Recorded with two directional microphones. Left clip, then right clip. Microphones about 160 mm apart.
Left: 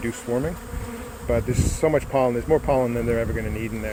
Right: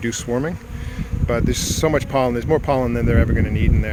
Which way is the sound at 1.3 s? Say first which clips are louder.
Right 3 dB; 35° right (ahead or behind).